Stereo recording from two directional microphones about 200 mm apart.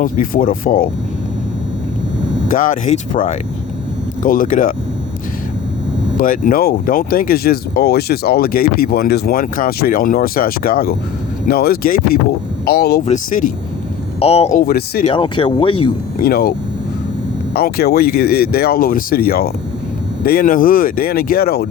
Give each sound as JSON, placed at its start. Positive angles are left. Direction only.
{"t": 0.0, "sound": "speech", "side_deg": 45}
{"t": 2.5, "sound": "speech", "side_deg": 40}
{"t": 6.1, "sound": "speech", "side_deg": 45}
{"t": 13.1, "sound": "speech", "side_deg": 40}
{"t": 14.2, "sound": "speech", "side_deg": 30}
{"t": 14.6, "sound": "speech", "side_deg": 50}
{"t": 15.0, "sound": "speech", "side_deg": 25}
{"t": 16.1, "sound": "speech", "side_deg": 50}